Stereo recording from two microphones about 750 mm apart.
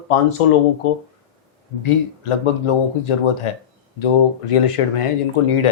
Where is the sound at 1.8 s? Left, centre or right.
Left.